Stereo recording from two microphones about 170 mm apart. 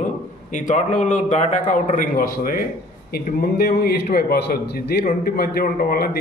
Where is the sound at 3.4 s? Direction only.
65° left (ahead or behind).